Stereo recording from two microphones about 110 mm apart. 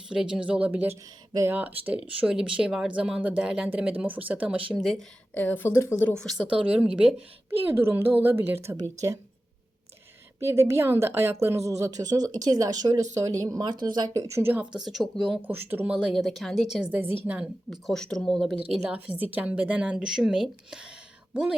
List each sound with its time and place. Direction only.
0.1 s speech: 5° right (ahead or behind)
4.7 s speech: centre (ahead or behind)
5.3 s speech: 15° left (ahead or behind)
6.1 s speech: 5° left (ahead or behind)
6.5 s a woman's voice: 10° right (ahead or behind); by 9.1 s 30° right (ahead or behind)
10.4 s a woman's voice: 25° right (ahead or behind); by 15.3 s centre (ahead or behind)
15.3 s speech: 20° right (ahead or behind)
16.1 s speech: centre (ahead or behind)
16.9 s a woman's voice: 20° right (ahead or behind)
17.2 s speech: 10° right (ahead or behind)
18.9 s speech: 15° right (ahead or behind)